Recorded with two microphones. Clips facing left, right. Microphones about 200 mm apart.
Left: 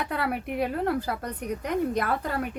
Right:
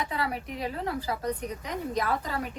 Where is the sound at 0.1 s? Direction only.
60° left (ahead or behind).